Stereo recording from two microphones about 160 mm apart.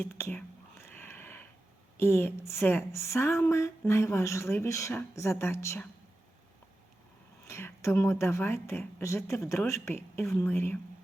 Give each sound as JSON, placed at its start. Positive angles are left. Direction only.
{"t": 0.0, "sound": "whispering", "side_deg": 15}
{"t": 2.0, "sound": "speech", "side_deg": 15}
{"t": 7.4, "sound": "speech", "side_deg": 15}